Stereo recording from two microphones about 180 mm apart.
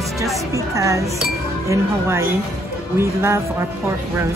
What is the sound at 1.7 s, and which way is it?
Speech, 15° right (ahead or behind).